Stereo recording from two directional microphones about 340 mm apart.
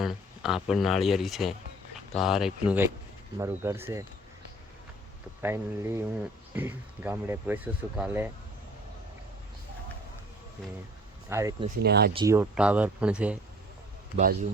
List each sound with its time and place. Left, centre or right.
0.0 s speech: centre
5.4 s speech: centre
11.3 s speech: centre
11.8 s speech: right
12.1 s speech: centre